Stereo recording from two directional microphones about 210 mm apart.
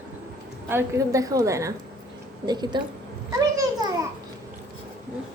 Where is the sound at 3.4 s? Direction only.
20° right (ahead or behind).